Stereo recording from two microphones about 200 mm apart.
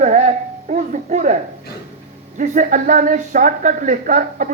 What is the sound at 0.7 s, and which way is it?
Music, 35° right (ahead or behind).